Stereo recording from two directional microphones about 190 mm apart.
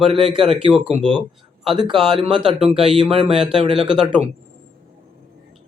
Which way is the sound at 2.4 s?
25° right (ahead or behind).